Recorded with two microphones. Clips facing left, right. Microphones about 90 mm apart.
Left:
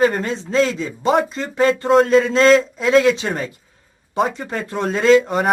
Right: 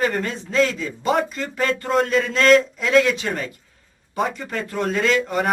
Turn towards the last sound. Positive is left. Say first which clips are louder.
# left 6 dB
turn(degrees=20)  # may be behind; listen again after turning